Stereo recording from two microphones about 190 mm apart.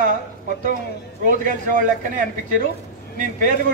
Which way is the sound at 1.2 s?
45° right (ahead or behind).